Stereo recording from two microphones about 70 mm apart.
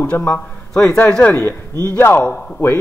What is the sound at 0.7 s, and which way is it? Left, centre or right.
Speech, centre.